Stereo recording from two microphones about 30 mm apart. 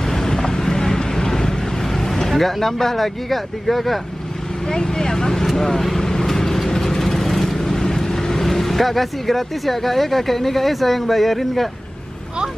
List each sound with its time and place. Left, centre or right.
0.1 s vehicle: centre
2.0 s speech: centre
4.6 s vehicle: left
5.6 s speech: centre
5.9 s vehicle: centre